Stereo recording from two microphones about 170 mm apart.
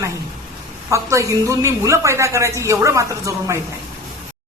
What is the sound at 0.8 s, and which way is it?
A woman's voice, 20° right (ahead or behind).